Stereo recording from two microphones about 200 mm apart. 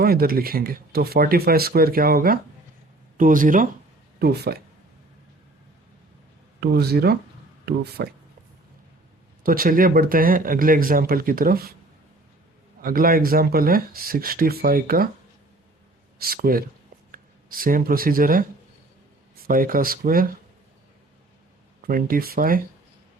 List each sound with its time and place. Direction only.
0.0 s speech: 50° right (ahead or behind)
6.6 s speech: 55° right (ahead or behind)
9.4 s speech: 45° right (ahead or behind)
12.8 s speech: 45° right (ahead or behind)
16.1 s speech: 50° right (ahead or behind)
21.8 s speech: 45° right (ahead or behind)